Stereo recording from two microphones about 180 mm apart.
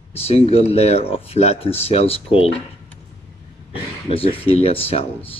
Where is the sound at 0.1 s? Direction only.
35° left (ahead or behind).